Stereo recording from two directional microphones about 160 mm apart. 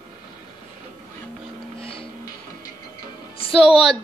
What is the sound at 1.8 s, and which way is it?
Music, 35° left (ahead or behind).